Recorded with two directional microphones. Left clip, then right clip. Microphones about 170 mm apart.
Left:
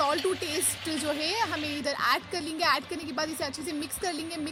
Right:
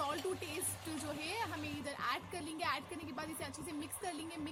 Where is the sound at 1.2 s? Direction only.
35° left (ahead or behind).